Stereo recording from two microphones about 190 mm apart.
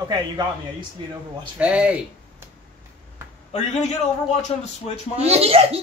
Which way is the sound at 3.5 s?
35° left (ahead or behind).